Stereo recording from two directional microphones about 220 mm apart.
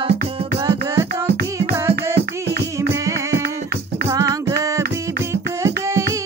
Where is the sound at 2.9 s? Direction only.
10° right (ahead or behind).